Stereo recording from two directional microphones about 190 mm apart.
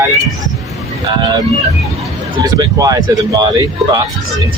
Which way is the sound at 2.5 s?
20° right (ahead or behind).